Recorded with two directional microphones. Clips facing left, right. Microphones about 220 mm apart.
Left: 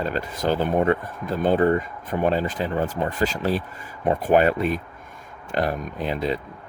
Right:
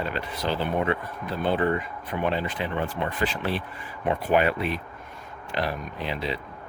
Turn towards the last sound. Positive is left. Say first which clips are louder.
# left 5 dB
turn(degrees=45)  # may be behind; listen again after turning